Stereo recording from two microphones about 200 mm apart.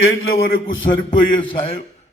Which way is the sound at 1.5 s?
25° left (ahead or behind).